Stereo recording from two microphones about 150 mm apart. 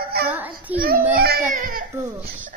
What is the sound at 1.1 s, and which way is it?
Speech, 90° right.